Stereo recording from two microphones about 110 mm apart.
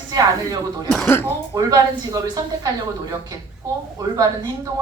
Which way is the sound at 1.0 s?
20° left (ahead or behind).